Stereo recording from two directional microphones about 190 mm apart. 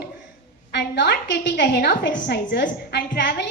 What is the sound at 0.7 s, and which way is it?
A woman's voice, 65° left (ahead or behind).